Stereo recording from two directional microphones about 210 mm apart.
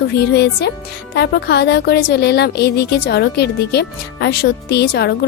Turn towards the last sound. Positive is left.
turn(degrees=50)  # may be behind; listen again after turning